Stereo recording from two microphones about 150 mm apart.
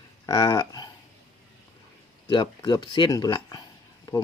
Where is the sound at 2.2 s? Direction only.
30° left (ahead or behind).